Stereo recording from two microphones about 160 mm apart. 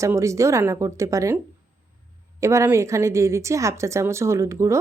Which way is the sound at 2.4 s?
20° right (ahead or behind).